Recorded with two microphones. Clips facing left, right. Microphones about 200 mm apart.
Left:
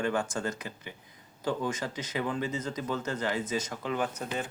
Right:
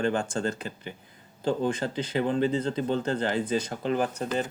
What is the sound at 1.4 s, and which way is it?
Speech, 30° right (ahead or behind).